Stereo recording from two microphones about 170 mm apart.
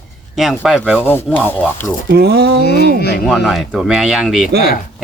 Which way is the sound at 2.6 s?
75° left (ahead or behind).